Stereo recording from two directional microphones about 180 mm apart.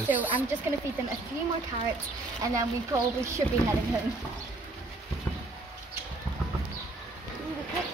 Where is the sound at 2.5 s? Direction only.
15° right (ahead or behind).